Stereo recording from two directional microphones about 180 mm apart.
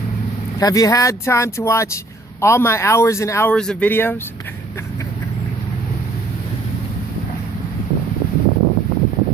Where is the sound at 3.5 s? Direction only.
5° left (ahead or behind).